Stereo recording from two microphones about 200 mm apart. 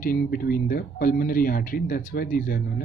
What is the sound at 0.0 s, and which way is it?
Speech, 45° left (ahead or behind).